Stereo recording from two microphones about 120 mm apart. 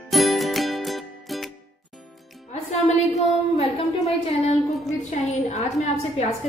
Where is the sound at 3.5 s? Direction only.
55° left (ahead or behind).